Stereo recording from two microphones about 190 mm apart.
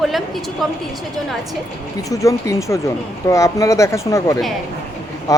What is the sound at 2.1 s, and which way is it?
Speech, 15° left (ahead or behind).